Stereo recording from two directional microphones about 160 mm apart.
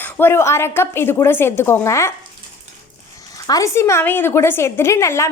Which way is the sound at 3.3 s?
20° left (ahead or behind).